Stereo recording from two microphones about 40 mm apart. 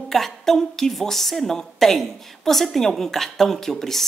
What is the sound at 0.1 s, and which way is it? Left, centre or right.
A woman's voice, centre.